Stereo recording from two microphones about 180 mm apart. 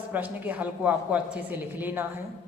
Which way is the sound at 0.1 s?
10° right (ahead or behind).